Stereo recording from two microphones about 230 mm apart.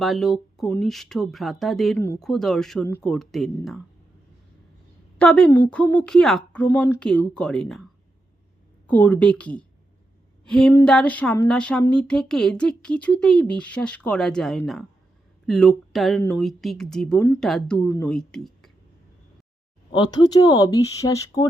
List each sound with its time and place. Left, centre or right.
0.0 s a woman's voice: centre
5.1 s a woman's voice: centre
8.9 s a woman's voice: centre
19.9 s speech: centre